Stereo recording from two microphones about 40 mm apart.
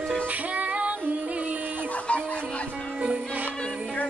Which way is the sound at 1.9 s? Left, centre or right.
Left.